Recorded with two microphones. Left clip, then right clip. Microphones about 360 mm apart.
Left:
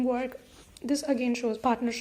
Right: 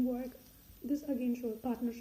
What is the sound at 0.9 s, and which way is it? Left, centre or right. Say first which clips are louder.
A woman's voice: left 8 dB; centre.